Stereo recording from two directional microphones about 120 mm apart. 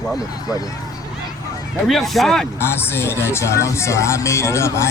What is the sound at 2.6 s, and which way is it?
Speech, 20° left (ahead or behind).